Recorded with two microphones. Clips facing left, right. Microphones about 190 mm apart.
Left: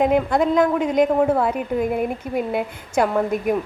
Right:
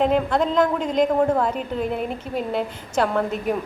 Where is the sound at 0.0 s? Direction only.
10° left (ahead or behind).